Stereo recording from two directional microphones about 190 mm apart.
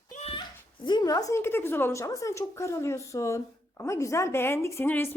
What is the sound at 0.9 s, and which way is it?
A woman's voice, 20° left (ahead or behind).